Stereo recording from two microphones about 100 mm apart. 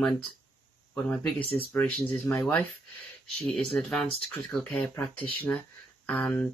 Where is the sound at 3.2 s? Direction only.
5° left (ahead or behind).